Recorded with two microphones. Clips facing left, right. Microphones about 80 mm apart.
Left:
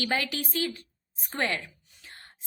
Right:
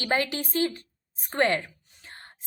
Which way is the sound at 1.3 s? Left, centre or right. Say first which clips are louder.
Right 6 dB; right.